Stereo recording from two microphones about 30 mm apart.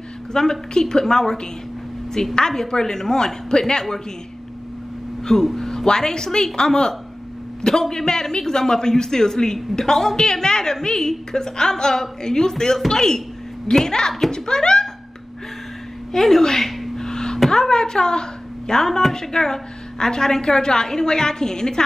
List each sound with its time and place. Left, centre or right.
0.3 s a woman's voice: centre
5.3 s a woman's voice: centre
7.9 s a woman's voice: centre
16.1 s a woman's voice: centre
16.9 s a sound: centre
18.9 s a woman's voice: centre
19.1 s a woman's voice: centre